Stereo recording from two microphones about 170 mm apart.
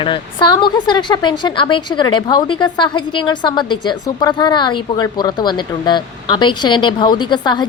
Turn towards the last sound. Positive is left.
turn(degrees=25)  # may be behind; listen again after turning